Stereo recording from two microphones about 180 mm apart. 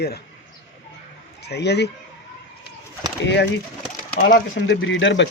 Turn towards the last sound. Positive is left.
turn(degrees=85)